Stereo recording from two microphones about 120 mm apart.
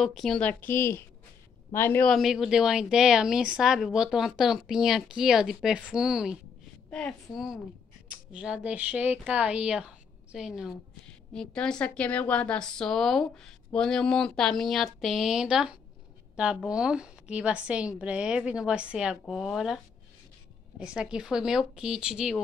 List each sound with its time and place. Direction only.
0.0 s a woman's voice: centre (ahead or behind); by 2.0 s 15° left (ahead or behind)
2.0 s a woman's voice: centre (ahead or behind)
6.9 s a woman's voice: 5° left (ahead or behind)
8.1 s a woman's voice: 10° right (ahead or behind)
11.1 s a woman's voice: 5° left (ahead or behind)
20.8 s a woman's voice: 5° right (ahead or behind)